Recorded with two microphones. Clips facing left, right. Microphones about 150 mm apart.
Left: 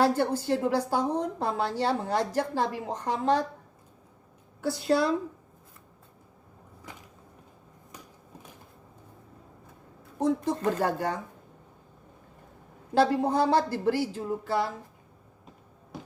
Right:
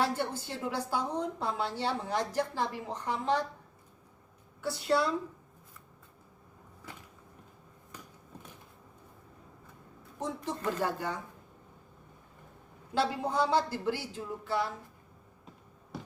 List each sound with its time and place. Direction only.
0.2 s a woman's voice: 45° left (ahead or behind)
4.6 s a woman's voice: 40° left (ahead or behind)
10.2 s a woman's voice: 40° left (ahead or behind)
12.9 s a woman's voice: 50° left (ahead or behind)